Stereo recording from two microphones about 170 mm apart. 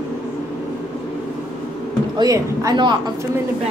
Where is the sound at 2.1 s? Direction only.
25° right (ahead or behind).